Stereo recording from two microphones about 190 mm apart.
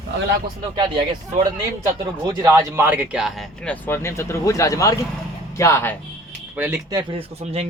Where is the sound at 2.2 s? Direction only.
20° right (ahead or behind); by 6.0 s 10° left (ahead or behind).